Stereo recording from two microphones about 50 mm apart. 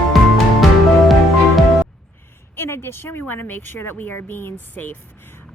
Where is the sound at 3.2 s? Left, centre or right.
Left.